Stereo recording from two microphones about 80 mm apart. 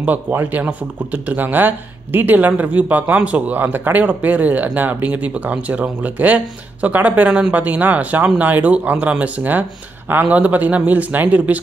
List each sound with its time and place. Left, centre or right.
0.0 s speech: right